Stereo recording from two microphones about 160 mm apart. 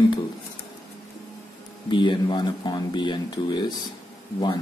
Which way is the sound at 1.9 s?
30° left (ahead or behind).